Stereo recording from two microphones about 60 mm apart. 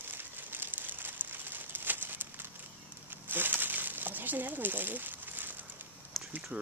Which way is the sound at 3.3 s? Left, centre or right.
Right.